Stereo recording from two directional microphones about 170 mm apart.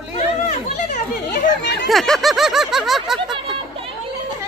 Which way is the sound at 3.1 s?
30° right (ahead or behind).